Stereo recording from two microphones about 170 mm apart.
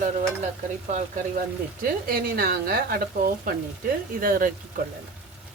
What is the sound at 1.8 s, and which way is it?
Speech, 60° right (ahead or behind).